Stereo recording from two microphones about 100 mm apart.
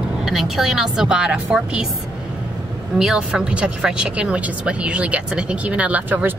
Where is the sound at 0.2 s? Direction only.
Centre (ahead or behind).